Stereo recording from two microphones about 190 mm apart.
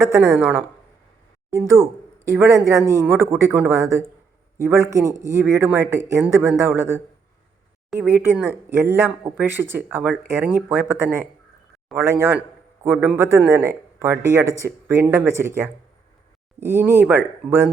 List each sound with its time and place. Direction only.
0.0 s a man's voice: 15° right (ahead or behind)